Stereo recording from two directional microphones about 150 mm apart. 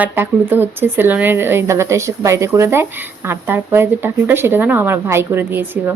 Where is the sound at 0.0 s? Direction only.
15° right (ahead or behind).